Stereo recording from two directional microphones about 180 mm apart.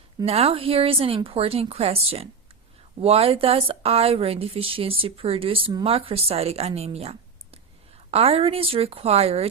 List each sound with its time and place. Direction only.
0.3 s speech: 35° right (ahead or behind)